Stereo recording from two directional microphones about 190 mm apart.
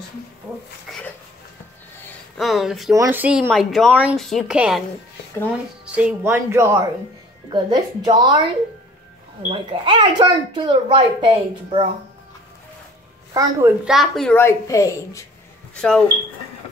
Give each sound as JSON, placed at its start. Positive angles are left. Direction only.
{"t": 0.8, "sound": "a sound", "side_deg": 5}
{"t": 2.3, "sound": "speech", "side_deg": 0}
{"t": 2.9, "sound": "speech", "side_deg": -15}
{"t": 5.9, "sound": "speech", "side_deg": -5}
{"t": 9.5, "sound": "speech", "side_deg": -25}
{"t": 13.3, "sound": "speech", "side_deg": -15}
{"t": 13.8, "sound": "speech", "side_deg": 0}
{"t": 14.3, "sound": "a woman's voice", "side_deg": 15}
{"t": 15.7, "sound": "speech", "side_deg": 5}